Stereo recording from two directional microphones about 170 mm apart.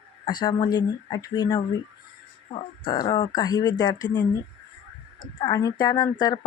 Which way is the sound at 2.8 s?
25° left (ahead or behind).